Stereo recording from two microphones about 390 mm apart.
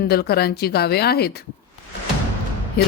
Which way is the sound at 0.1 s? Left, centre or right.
Left.